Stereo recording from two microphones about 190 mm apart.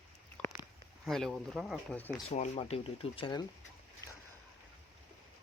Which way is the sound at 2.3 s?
35° left (ahead or behind).